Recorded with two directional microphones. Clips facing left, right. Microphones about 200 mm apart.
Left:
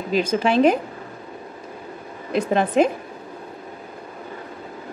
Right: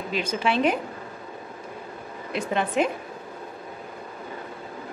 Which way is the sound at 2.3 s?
40° left (ahead or behind).